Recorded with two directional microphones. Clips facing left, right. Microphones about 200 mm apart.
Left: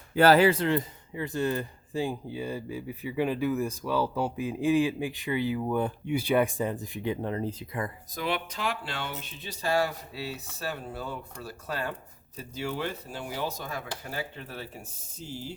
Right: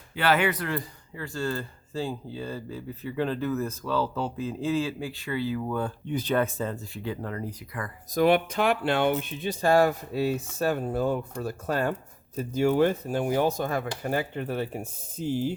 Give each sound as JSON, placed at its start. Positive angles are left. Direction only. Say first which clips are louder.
{"t": 0.1, "sound": "speech", "louder": "left 5 dB", "side_deg": 40}
{"t": 8.1, "sound": "speech", "louder": "right 12 dB", "side_deg": -50}